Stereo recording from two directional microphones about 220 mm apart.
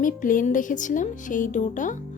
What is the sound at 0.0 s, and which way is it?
A woman's voice, 35° left (ahead or behind).